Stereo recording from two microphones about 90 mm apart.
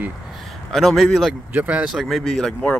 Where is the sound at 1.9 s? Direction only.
Centre (ahead or behind).